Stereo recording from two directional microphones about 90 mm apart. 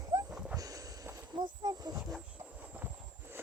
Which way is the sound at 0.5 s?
40° right (ahead or behind).